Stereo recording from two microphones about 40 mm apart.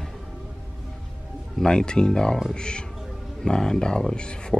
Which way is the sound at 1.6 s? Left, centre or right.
Left.